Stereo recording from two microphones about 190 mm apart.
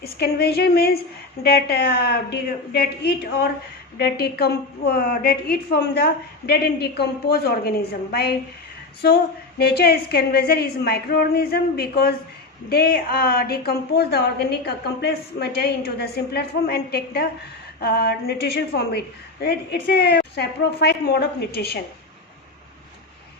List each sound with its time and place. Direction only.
0.0 s a woman's voice: 55° left (ahead or behind)